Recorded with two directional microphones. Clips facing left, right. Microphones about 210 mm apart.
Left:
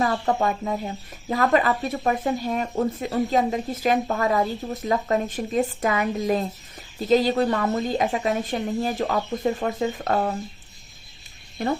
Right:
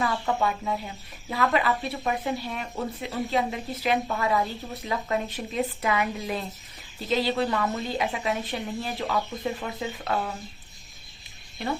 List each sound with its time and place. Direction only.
0.0 s speech: 40° left (ahead or behind)
11.6 s speech: 45° left (ahead or behind)